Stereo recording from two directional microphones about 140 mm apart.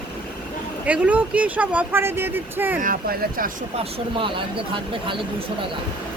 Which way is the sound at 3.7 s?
40° right (ahead or behind).